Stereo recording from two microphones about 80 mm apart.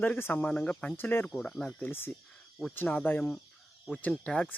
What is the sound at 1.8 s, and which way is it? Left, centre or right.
Speech, left.